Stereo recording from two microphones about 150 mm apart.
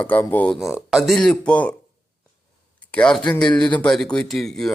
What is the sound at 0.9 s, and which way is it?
Speech, centre (ahead or behind).